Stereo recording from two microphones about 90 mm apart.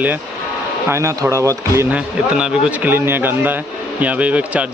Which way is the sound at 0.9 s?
30° right (ahead or behind).